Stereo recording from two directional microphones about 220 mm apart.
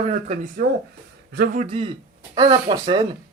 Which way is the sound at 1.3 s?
45° right (ahead or behind).